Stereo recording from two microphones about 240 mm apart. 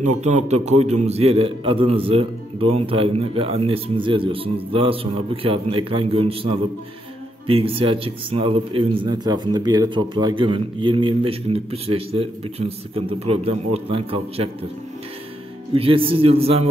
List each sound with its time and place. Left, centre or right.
0.2 s speech: right
15.7 s speech: right